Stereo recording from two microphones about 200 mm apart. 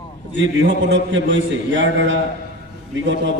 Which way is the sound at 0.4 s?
65° right (ahead or behind).